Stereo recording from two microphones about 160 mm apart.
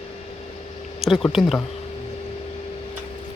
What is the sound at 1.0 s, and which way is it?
Speech, centre (ahead or behind).